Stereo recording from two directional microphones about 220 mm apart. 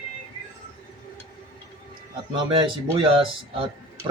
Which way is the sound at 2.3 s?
20° right (ahead or behind).